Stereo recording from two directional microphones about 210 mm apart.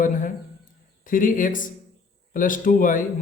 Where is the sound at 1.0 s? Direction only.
40° left (ahead or behind).